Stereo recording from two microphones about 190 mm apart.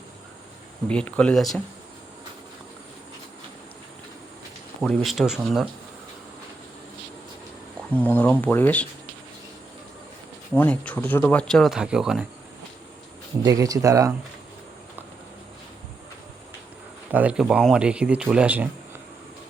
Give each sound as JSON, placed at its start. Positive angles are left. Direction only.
{"t": 0.9, "sound": "speech", "side_deg": 5}
{"t": 5.0, "sound": "speech", "side_deg": 0}
{"t": 7.8, "sound": "speech", "side_deg": 5}
{"t": 10.5, "sound": "speech", "side_deg": 10}
{"t": 13.4, "sound": "speech", "side_deg": -15}
{"t": 17.1, "sound": "speech", "side_deg": -10}